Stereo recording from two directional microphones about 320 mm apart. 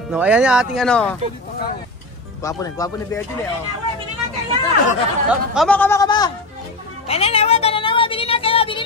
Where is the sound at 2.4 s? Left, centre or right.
Centre.